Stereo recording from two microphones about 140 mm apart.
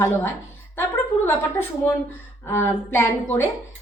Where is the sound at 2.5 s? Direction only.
15° left (ahead or behind).